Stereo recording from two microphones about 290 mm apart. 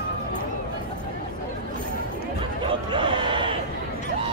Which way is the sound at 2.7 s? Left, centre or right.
Centre.